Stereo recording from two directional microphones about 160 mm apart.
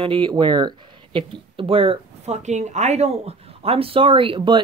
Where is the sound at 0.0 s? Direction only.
30° right (ahead or behind).